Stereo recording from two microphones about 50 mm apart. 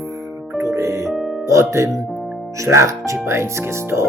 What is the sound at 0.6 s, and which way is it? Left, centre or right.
Music, right.